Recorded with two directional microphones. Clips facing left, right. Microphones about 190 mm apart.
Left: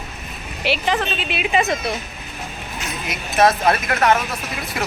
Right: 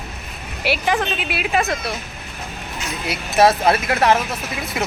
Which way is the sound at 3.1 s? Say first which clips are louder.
Right 2 dB; 30° right (ahead or behind).